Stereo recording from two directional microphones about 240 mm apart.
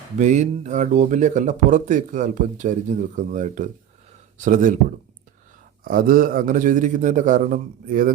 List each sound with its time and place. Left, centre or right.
0.2 s speech: right
5.8 s speech: right